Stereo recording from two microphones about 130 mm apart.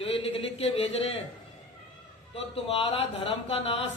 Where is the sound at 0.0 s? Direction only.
45° left (ahead or behind).